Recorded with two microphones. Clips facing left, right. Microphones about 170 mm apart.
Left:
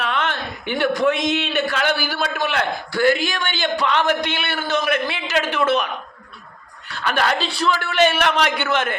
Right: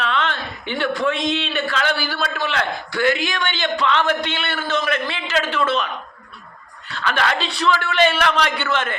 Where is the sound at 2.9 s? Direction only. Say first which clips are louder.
Left 2 dB; 40° left (ahead or behind).